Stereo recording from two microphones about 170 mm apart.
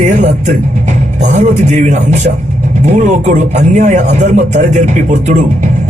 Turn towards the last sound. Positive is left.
turn(degrees=-45)  # may be behind; listen again after turning